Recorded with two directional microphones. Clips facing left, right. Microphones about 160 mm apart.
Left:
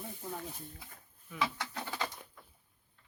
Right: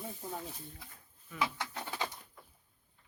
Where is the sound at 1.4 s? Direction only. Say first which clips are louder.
Even; 20° right (ahead or behind).